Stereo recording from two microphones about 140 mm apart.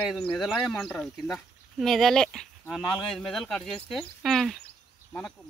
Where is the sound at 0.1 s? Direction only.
5° left (ahead or behind).